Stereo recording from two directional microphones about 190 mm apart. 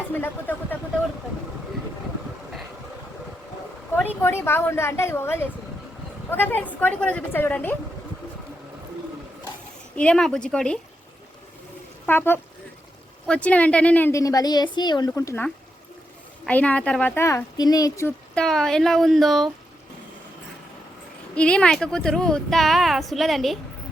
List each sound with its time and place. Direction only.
0.1 s a woman's voice: 10° left (ahead or behind)
4.2 s a woman's voice: 10° left (ahead or behind)
9.9 s a woman's voice: 5° left (ahead or behind)
12.0 s a woman's voice: 10° left (ahead or behind)
16.5 s a woman's voice: 5° left (ahead or behind)
18.3 s a woman's voice: 5° left (ahead or behind)
21.3 s a woman's voice: 5° left (ahead or behind)